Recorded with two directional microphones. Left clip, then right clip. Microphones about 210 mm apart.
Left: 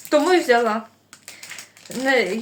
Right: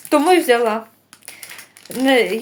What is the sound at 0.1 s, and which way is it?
Speech, 35° right (ahead or behind).